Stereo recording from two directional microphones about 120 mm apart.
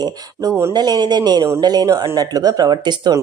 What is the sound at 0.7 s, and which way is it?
Speech, 35° right (ahead or behind).